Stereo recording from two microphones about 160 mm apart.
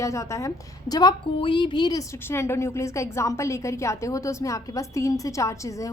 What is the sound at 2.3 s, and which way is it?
A woman's voice, 15° left (ahead or behind).